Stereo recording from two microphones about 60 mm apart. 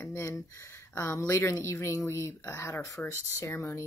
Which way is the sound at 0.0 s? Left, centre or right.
Left.